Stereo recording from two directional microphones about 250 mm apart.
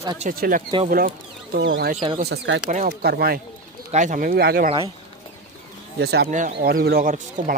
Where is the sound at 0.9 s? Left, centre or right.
Right.